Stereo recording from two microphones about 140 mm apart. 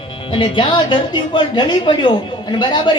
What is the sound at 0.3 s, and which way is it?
A woman's voice, 35° left (ahead or behind).